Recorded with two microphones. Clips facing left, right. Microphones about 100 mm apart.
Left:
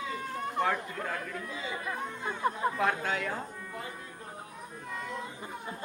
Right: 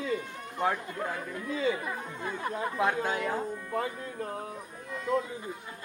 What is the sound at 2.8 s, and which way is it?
Speech, 20° right (ahead or behind).